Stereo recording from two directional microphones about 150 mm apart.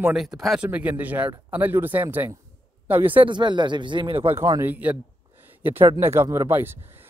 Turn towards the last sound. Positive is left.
turn(degrees=-15)  # may be behind; listen again after turning